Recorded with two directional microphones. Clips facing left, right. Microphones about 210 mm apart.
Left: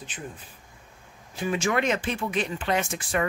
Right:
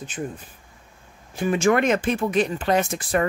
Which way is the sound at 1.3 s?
50° right (ahead or behind).